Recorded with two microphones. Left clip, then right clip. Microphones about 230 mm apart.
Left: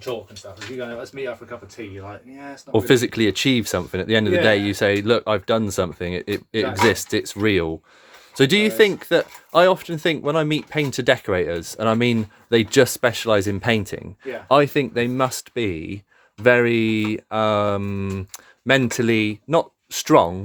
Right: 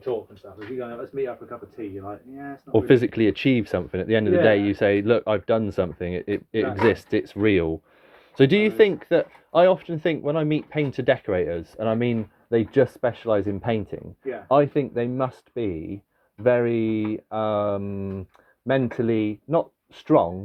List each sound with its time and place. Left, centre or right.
2.7 s speech: left